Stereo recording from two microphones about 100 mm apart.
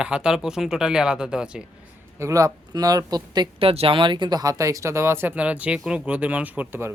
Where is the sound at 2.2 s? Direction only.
35° right (ahead or behind).